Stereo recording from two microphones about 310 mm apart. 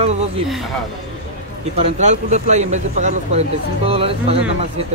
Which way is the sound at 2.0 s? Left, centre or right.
Right.